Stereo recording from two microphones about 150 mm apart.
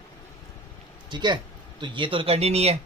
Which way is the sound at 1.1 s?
30° right (ahead or behind).